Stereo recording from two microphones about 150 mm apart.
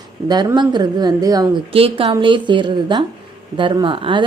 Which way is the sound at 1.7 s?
40° right (ahead or behind).